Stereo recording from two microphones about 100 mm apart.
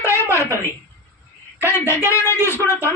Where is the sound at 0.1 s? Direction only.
25° left (ahead or behind).